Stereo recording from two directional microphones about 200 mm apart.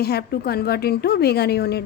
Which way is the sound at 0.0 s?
55° left (ahead or behind).